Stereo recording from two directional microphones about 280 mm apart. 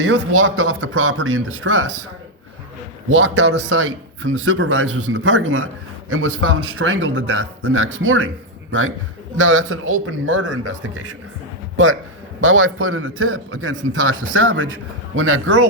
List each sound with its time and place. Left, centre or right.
0.0 s speech: right
3.1 s speech: right
9.4 s speech: right
12.5 s speech: right